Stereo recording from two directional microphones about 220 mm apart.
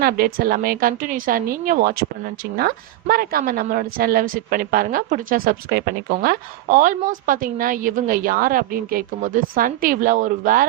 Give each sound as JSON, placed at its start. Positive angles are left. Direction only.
{"t": 0.0, "sound": "a woman's voice", "side_deg": -40}